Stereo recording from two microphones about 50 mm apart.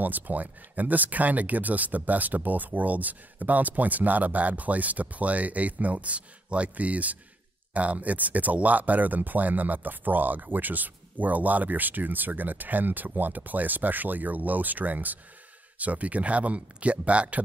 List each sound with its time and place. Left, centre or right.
0.0 s speech: right